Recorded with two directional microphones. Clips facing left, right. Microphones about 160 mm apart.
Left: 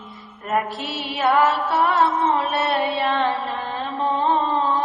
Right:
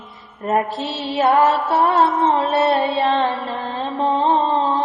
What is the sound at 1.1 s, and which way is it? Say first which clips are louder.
Music: right 3 dB; 30° right (ahead or behind).